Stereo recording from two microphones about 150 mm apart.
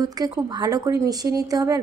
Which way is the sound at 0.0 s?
25° right (ahead or behind).